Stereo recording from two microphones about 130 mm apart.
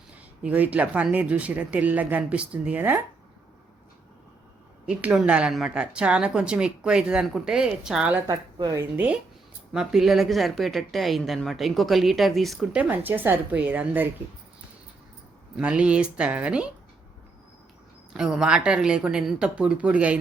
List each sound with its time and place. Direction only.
0.4 s speech: 10° right (ahead or behind)
4.9 s speech: 10° right (ahead or behind)
8.3 s speech: 30° right (ahead or behind)
8.8 s speech: 10° right (ahead or behind)
12.7 s speech: 10° right (ahead or behind)
15.5 s speech: 10° right (ahead or behind)
18.1 s speech: 5° right (ahead or behind)